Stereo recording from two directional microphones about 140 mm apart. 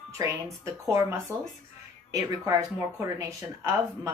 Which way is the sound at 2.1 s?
25° right (ahead or behind).